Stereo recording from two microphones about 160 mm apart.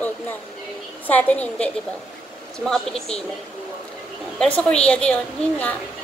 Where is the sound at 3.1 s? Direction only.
40° left (ahead or behind).